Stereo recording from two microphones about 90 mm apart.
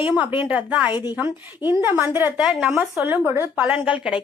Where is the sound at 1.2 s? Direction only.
25° right (ahead or behind).